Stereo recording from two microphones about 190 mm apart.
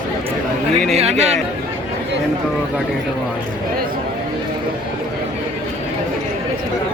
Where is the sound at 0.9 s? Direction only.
35° right (ahead or behind).